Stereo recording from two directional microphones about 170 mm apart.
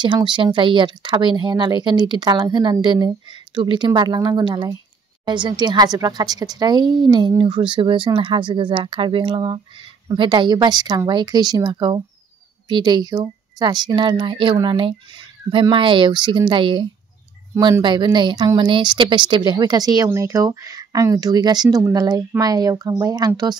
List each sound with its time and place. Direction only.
0.0 s speech: 25° right (ahead or behind)
17.8 s speech: 25° right (ahead or behind)